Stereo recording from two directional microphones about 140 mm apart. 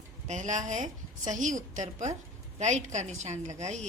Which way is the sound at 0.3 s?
60° right (ahead or behind).